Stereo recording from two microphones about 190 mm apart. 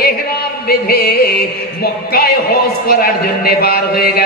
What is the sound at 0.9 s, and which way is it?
Music, 55° left (ahead or behind).